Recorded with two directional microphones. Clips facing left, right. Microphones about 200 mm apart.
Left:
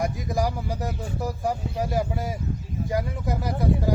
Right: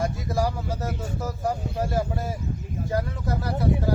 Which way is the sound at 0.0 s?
15° left (ahead or behind).